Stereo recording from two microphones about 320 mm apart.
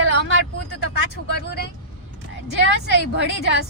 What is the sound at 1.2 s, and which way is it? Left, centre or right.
Speech, left.